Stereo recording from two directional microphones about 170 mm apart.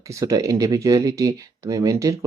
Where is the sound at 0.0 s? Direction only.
20° right (ahead or behind).